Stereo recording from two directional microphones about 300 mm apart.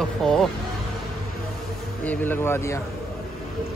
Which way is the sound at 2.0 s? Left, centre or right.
Centre.